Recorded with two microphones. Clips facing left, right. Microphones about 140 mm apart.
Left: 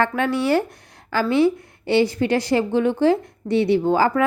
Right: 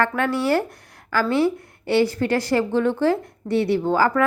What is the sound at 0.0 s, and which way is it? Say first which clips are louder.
A woman's voice: left 1 dB; 20° left (ahead or behind).